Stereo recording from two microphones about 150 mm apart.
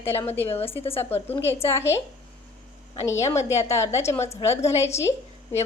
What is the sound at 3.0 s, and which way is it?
A woman's voice, 20° left (ahead or behind).